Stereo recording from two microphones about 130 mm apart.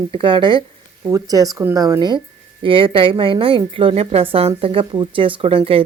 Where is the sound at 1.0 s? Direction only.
25° right (ahead or behind).